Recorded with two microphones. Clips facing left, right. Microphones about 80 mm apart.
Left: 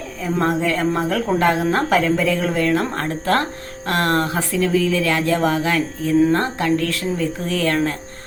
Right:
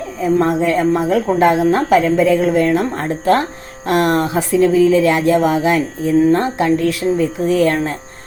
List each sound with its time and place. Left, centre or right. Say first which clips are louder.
0.8 s speech: right 5 dB; centre
2.1 s a woman's voice: right 6 dB; centre